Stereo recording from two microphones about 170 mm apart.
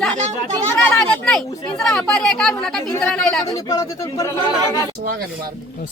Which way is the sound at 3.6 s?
20° left (ahead or behind).